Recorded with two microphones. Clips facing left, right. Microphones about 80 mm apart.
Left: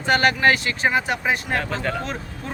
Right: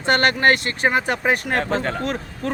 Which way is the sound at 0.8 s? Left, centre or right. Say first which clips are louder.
Right 2 dB; right.